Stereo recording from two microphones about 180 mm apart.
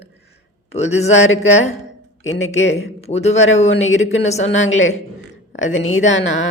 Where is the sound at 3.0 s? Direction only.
35° left (ahead or behind).